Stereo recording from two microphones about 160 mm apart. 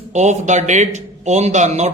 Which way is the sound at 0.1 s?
45° right (ahead or behind).